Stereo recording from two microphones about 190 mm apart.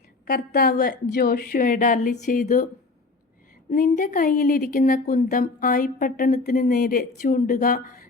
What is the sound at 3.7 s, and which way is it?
A woman's voice, 45° left (ahead or behind).